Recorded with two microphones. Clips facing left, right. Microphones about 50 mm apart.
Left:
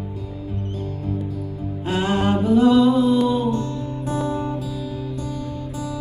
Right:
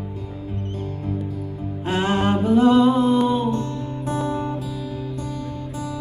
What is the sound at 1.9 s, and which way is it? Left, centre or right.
Music, right.